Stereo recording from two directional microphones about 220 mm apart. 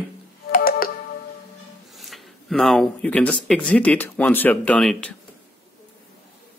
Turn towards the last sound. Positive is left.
turn(degrees=5)  # may be behind; listen again after turning